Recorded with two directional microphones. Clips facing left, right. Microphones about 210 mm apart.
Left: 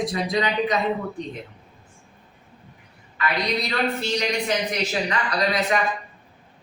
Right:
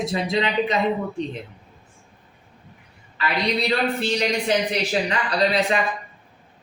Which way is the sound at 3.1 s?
30° right (ahead or behind).